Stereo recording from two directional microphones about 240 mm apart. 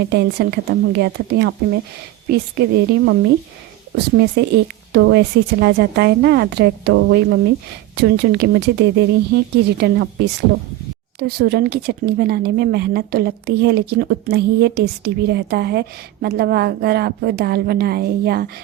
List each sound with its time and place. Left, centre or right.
0.1 s a woman's voice: right
11.2 s a woman's voice: right